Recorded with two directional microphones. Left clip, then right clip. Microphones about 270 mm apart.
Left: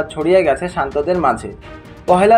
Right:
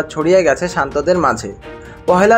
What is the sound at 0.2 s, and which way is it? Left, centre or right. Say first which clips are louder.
Speech: right 1 dB; right.